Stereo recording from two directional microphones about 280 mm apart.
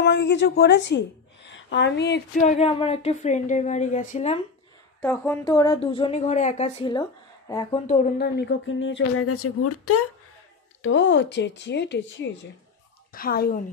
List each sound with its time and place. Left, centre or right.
0.0 s a woman's voice: left
5.0 s speech: centre
7.8 s speech: left
10.8 s a woman's voice: left